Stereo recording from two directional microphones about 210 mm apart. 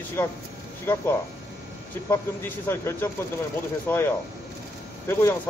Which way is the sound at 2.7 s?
10° left (ahead or behind).